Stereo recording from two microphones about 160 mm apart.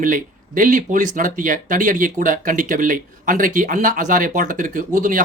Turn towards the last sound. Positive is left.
turn(degrees=-55)  # may be behind; listen again after turning